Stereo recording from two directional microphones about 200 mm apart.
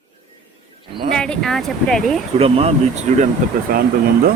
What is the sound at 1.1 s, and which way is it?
Speech, 5° left (ahead or behind).